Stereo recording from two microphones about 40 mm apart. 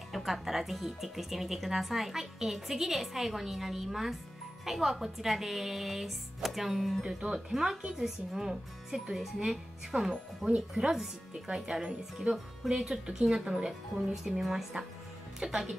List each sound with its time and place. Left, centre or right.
0.1 s speech: centre
7.2 s speech: centre